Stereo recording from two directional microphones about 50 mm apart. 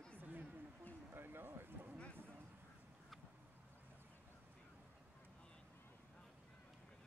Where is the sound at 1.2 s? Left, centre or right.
Right.